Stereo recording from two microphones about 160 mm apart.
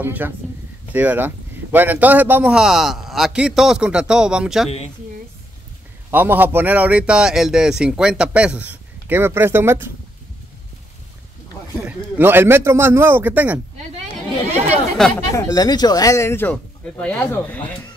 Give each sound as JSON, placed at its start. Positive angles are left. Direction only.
{"t": 0.0, "sound": "speech", "side_deg": -10}
{"t": 4.6, "sound": "a woman's voice", "side_deg": 40}
{"t": 6.0, "sound": "speech", "side_deg": -15}
{"t": 11.8, "sound": "speech", "side_deg": -10}
{"t": 15.1, "sound": "speech", "side_deg": 20}